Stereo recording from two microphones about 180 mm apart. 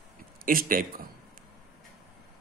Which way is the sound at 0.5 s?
50° right (ahead or behind).